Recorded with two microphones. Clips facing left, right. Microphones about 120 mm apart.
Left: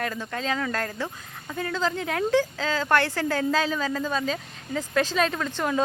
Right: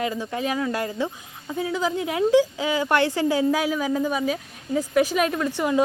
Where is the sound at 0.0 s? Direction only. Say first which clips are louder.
Right 4 dB; 15° right (ahead or behind).